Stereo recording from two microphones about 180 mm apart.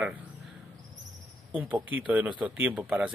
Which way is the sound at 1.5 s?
10° right (ahead or behind).